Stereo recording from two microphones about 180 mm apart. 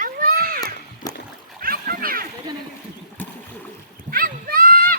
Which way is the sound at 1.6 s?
55° right (ahead or behind).